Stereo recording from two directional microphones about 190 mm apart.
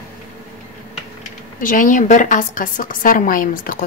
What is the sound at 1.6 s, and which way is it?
A woman's voice, 45° left (ahead or behind).